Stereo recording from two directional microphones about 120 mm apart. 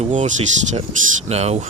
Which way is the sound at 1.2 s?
65° right (ahead or behind).